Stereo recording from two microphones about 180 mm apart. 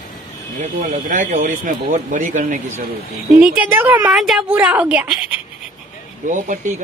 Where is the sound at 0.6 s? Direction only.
45° right (ahead or behind).